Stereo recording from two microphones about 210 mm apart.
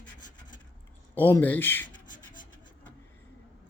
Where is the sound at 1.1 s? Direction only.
10° left (ahead or behind).